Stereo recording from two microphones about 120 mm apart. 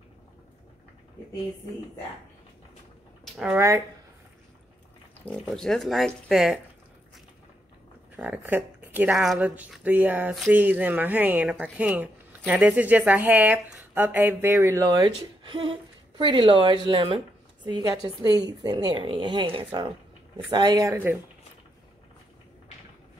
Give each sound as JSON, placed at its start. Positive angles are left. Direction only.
{"t": 3.5, "sound": "speech", "side_deg": -25}
{"t": 5.2, "sound": "speech", "side_deg": 5}
{"t": 8.2, "sound": "speech", "side_deg": -10}
{"t": 9.1, "sound": "speech", "side_deg": 0}
{"t": 9.8, "sound": "speech", "side_deg": -15}
{"t": 17.6, "sound": "speech", "side_deg": -35}